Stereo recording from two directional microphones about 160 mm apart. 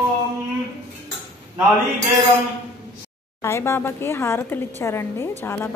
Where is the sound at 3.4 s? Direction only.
15° left (ahead or behind).